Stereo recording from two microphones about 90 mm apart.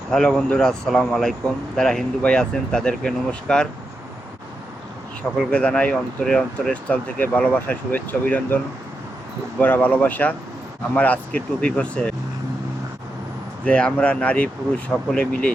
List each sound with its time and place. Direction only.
0.1 s speech: 5° left (ahead or behind)
5.5 s speech: 10° left (ahead or behind)
9.6 s speech: 20° left (ahead or behind)
13.7 s speech: 15° left (ahead or behind)